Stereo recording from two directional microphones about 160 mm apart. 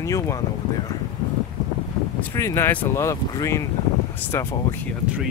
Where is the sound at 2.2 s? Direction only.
15° left (ahead or behind).